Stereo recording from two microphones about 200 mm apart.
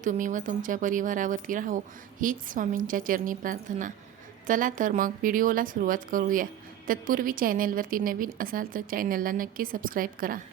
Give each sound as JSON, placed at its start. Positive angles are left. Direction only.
{"t": 0.0, "sound": "speech", "side_deg": -40}